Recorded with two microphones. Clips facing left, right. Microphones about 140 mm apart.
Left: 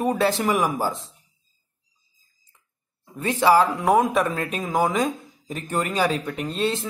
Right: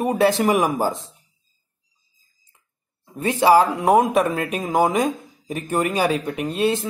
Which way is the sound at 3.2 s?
15° right (ahead or behind).